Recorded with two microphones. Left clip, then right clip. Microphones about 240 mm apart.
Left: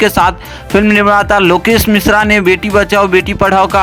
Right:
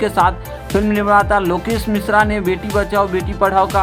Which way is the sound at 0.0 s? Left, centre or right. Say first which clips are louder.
Left 5 dB; left.